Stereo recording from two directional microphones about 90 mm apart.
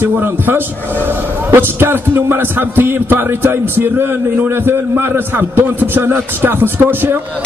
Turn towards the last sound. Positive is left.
turn(degrees=-20)  # may be behind; listen again after turning